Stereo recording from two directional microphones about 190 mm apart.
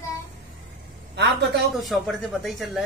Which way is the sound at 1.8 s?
Centre (ahead or behind).